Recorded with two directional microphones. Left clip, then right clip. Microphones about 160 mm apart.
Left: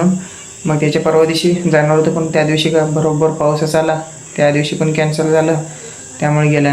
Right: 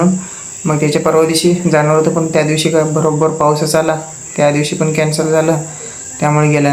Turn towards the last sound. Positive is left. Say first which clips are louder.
# right 2 dB
turn(degrees=-20)  # may be behind; listen again after turning